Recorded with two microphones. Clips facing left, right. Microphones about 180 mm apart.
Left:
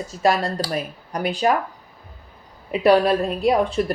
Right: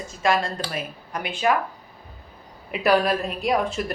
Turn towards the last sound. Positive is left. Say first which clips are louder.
# left 5 dB
turn(degrees=30)  # may be behind; listen again after turning